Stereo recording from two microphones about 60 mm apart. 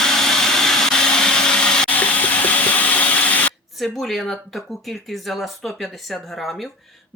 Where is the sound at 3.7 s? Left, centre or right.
Centre.